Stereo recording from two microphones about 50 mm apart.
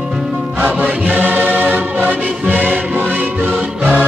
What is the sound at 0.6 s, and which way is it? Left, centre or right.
Music, right.